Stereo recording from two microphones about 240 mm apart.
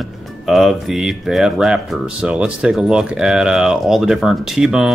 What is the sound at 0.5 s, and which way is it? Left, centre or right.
Speech, centre.